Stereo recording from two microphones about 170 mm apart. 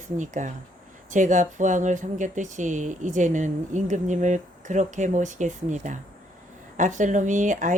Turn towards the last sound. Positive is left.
turn(degrees=-50)  # may be behind; listen again after turning